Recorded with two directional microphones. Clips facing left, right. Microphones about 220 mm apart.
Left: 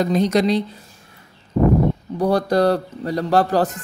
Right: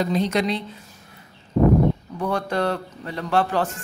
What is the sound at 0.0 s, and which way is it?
Speech, 45° left (ahead or behind).